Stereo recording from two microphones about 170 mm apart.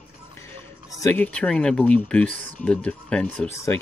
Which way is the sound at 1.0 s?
10° left (ahead or behind).